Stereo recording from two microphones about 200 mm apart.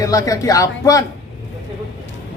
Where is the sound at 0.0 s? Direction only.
15° left (ahead or behind).